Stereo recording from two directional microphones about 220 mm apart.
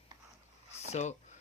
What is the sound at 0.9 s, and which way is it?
Speech, 30° left (ahead or behind).